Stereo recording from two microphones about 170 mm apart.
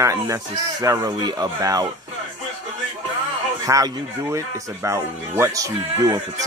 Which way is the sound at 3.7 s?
20° right (ahead or behind).